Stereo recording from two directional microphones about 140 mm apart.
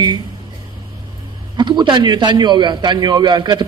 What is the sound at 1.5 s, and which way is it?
A man's voice, 35° right (ahead or behind).